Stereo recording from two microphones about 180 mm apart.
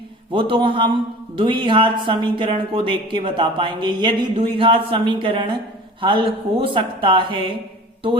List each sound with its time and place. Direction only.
0.3 s speech: 30° right (ahead or behind)